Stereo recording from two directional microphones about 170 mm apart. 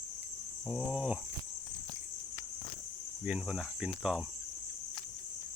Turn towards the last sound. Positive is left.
turn(degrees=-5)  # may be behind; listen again after turning